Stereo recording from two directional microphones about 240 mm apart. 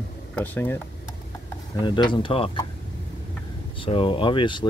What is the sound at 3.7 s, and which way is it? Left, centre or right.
Speech, left.